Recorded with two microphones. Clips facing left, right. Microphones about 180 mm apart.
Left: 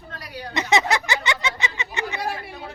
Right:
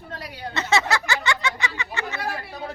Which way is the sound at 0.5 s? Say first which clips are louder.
Left 2 dB; 15° left (ahead or behind).